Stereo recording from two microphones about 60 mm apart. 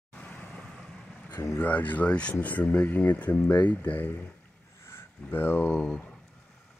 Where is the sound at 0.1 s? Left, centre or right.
Left.